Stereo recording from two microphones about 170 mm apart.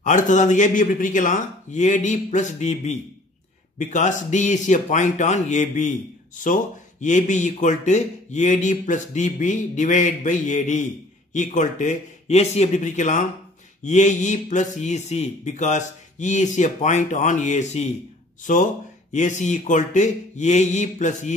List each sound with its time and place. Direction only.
0.0 s speech: 45° left (ahead or behind)